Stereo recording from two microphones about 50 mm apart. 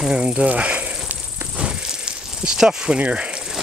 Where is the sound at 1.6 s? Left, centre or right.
Centre.